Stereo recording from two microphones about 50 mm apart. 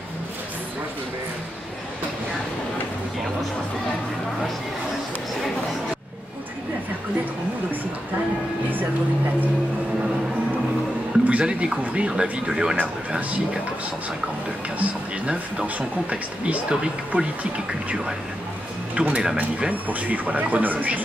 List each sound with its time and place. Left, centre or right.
11.2 s speech: right
12.7 s speech: right
15.6 s speech: right
18.9 s speech: right